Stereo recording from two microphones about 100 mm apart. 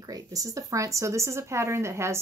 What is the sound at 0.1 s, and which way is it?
A woman's voice, 35° right (ahead or behind).